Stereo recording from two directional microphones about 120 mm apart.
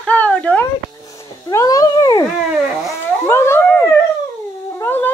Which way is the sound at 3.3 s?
20° left (ahead or behind).